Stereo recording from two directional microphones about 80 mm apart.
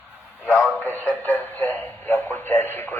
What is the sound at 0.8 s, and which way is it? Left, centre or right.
A man's voice, left.